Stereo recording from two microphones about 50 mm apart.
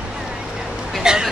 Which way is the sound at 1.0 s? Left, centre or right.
Centre.